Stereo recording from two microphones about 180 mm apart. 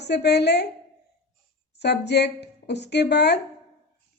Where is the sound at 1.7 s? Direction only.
70° left (ahead or behind).